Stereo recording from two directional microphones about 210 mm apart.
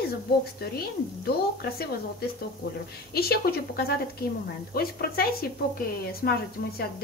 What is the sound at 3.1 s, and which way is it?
Speech, 50° left (ahead or behind).